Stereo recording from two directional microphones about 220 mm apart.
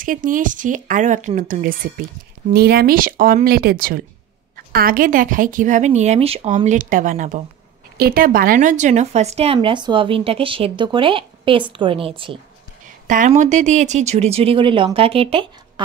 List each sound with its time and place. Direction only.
0.0 s a woman's voice: 40° right (ahead or behind)
13.0 s speech: 35° right (ahead or behind)